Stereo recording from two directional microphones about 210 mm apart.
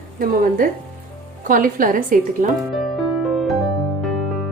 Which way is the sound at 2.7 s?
Centre (ahead or behind).